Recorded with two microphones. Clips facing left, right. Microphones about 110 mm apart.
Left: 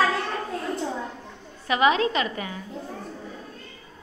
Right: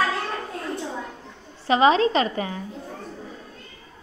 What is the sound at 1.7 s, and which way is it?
Speech, 30° right (ahead or behind).